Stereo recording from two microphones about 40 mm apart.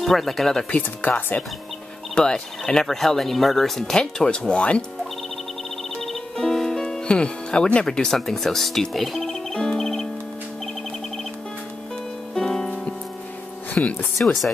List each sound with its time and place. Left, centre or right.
0.0 s speech: centre
0.7 s speech: left
2.1 s speech: centre
3.9 s speech: centre
5.9 s music: centre
7.1 s speech: left; by 9.7 s centre
9.8 s music: centre
12.4 s music: centre
12.6 s music: left
13.8 s speech: left
14.2 s speech: centre